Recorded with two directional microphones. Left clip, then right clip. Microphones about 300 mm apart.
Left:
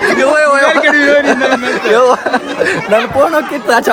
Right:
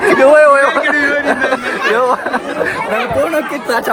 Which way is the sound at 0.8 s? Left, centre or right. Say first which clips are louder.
Left 4 dB; centre.